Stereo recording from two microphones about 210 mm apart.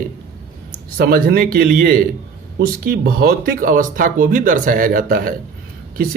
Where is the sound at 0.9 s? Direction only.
45° right (ahead or behind).